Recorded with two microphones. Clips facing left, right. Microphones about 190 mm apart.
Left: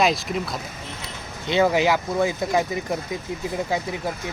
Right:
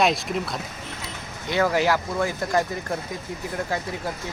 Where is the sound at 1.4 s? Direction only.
20° left (ahead or behind).